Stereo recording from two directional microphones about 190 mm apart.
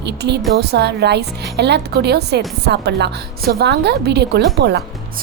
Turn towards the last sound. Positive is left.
turn(degrees=-60)  # may be behind; listen again after turning